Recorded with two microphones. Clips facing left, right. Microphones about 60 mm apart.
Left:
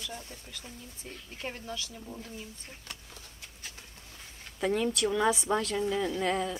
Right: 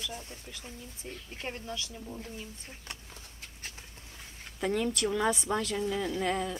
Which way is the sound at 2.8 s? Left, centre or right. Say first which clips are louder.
Right 2 dB; right.